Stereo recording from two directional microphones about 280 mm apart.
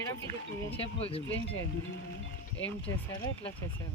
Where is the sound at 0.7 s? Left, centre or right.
Centre.